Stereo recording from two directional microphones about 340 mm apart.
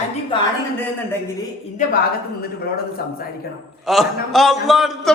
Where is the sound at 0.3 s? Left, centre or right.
Centre.